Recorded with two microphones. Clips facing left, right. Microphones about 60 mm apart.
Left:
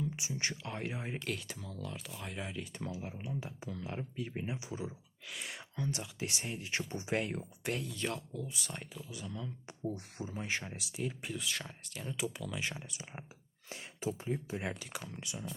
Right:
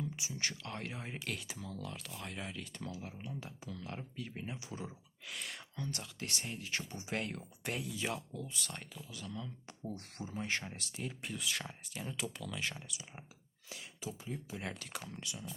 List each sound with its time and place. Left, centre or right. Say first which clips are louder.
0.2 s speech: left 2 dB; left
0.6 s speech: left 3 dB; centre
1.2 s speech: left 2 dB; centre
2.7 s speech: left 3 dB; centre
4.7 s speech: left 4 dB; centre
5.5 s speech: left 7 dB; centre
7.6 s speech: left 1 dB; centre
8.4 s speech: left 1 dB; centre
12.1 s speech: left 6 dB; centre
12.9 s speech: left 3 dB; left
13.7 s a sound: left 6 dB; left
14.3 s speech: left 5 dB; left
14.8 s speech: left 1 dB; centre
15.2 s speech: left 2 dB; left